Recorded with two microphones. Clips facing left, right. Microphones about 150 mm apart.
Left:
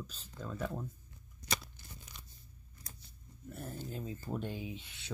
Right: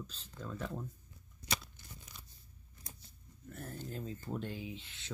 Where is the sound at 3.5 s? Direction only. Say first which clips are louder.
Left 1 dB; 10° left (ahead or behind).